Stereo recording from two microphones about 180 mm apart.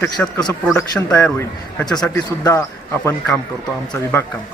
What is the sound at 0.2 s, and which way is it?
A man's voice, 10° left (ahead or behind).